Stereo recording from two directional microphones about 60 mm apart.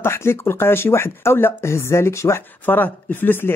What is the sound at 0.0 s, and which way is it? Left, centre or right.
Speech, left.